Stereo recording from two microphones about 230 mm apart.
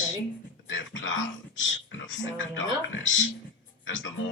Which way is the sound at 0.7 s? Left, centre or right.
Left.